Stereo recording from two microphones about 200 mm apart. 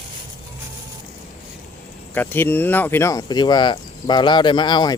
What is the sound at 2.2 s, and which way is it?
Speech, 10° left (ahead or behind).